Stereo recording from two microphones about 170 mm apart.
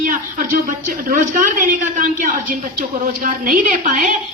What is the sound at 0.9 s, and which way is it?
A woman's voice, 50° right (ahead or behind).